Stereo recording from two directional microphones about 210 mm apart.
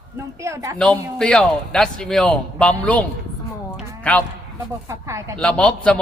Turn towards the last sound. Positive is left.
turn(degrees=5)  # may be behind; listen again after turning